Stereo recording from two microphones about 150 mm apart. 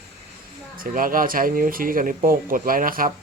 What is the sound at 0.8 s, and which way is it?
Speech, 70° right (ahead or behind).